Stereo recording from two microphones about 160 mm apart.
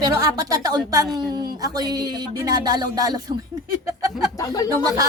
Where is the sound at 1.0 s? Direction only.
Centre (ahead or behind).